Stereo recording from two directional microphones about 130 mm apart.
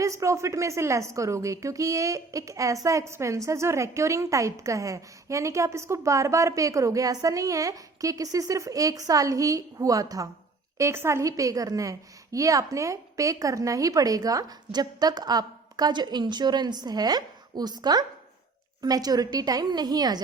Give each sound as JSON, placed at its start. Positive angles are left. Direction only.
{"t": 0.0, "sound": "a woman's voice", "side_deg": -25}